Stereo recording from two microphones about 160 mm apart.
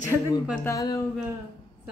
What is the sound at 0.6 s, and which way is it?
Speech, 20° left (ahead or behind).